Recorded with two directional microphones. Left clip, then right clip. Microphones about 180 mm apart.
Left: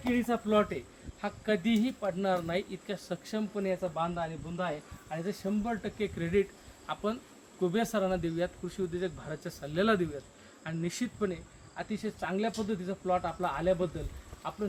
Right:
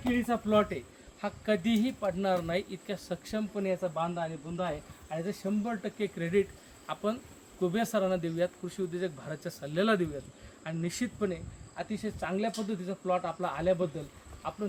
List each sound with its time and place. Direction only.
0.0 s speech: 5° right (ahead or behind)